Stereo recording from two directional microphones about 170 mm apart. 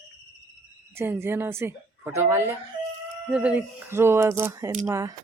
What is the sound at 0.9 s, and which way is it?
Speech, 15° right (ahead or behind).